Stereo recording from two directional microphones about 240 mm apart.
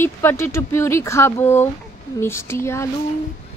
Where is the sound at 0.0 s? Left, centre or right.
Centre.